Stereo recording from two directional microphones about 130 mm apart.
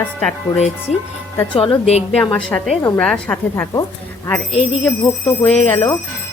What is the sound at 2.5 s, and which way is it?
Speech, 15° left (ahead or behind).